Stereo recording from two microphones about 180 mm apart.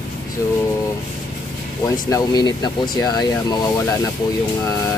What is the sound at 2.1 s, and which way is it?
Speech, 20° left (ahead or behind).